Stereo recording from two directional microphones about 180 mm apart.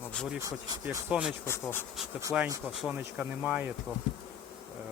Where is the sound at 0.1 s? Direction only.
5° left (ahead or behind).